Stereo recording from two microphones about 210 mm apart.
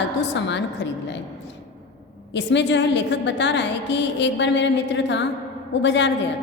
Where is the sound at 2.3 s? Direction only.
60° left (ahead or behind).